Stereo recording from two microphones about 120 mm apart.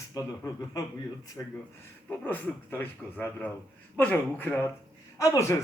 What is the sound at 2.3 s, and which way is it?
A man's voice, 15° left (ahead or behind).